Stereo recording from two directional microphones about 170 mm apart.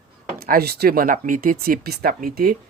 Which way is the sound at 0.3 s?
60° right (ahead or behind).